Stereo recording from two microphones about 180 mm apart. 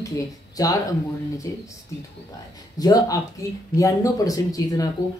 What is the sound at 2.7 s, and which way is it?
Speech, 20° left (ahead or behind).